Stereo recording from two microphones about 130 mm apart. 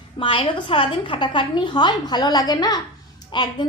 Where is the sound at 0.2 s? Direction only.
40° left (ahead or behind).